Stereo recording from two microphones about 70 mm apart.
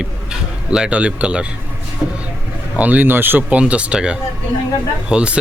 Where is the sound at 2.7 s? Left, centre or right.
Right.